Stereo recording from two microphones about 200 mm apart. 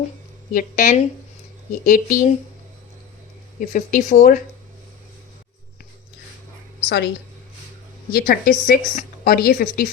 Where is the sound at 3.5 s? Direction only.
40° left (ahead or behind).